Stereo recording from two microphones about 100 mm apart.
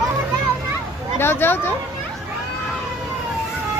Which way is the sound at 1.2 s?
25° left (ahead or behind).